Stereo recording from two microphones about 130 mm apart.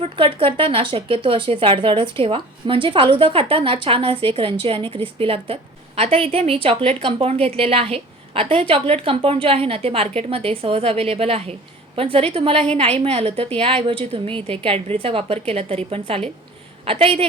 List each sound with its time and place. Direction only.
0.0 s speech: 45° right (ahead or behind)